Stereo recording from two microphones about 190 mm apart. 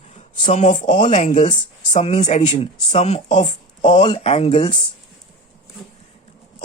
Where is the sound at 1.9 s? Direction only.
35° left (ahead or behind).